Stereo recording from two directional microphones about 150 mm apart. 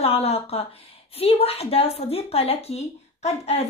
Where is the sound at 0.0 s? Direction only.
40° left (ahead or behind).